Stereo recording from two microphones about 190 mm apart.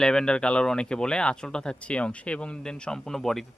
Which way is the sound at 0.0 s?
5° left (ahead or behind).